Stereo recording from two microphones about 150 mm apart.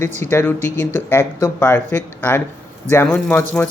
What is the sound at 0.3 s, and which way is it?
Speech, 15° left (ahead or behind).